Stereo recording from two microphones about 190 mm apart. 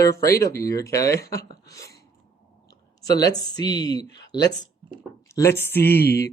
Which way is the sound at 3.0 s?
20° left (ahead or behind).